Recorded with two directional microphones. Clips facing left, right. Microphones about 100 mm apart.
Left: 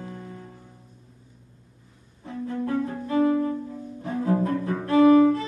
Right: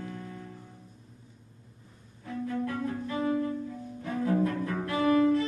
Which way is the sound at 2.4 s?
30° left (ahead or behind).